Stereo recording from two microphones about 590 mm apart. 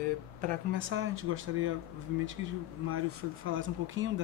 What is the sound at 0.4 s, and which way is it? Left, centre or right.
Speech, centre.